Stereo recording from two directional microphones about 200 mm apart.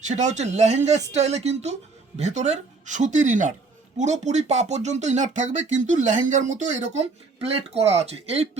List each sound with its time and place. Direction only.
0.0 s speech: 35° right (ahead or behind)